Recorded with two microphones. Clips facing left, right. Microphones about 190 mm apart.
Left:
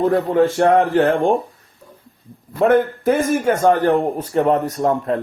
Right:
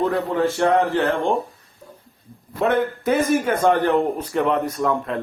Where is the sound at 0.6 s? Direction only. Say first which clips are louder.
Left 2 dB; 45° left (ahead or behind).